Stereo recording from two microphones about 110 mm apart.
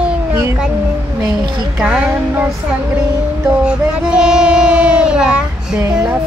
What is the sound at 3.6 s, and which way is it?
Child singing, 10° right (ahead or behind).